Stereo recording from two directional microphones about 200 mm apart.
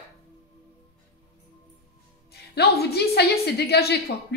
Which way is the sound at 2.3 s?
50° left (ahead or behind).